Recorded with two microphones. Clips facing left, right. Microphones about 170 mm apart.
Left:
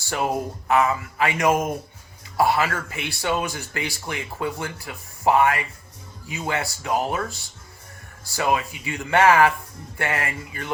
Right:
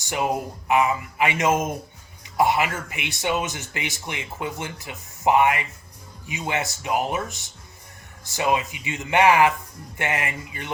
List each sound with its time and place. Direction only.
0.0 s speech: 20° right (ahead or behind)